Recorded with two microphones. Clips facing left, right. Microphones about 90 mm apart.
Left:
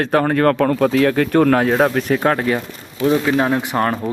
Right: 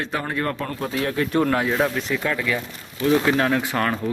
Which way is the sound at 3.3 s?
20° left (ahead or behind).